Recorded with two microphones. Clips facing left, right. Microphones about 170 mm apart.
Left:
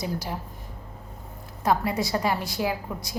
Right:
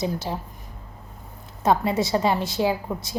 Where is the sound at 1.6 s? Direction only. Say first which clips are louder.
Right 3 dB; 25° right (ahead or behind).